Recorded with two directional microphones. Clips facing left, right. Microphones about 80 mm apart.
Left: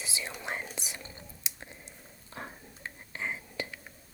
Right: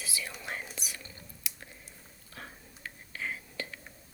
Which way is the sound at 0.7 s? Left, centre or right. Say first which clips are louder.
Left 2 dB; left.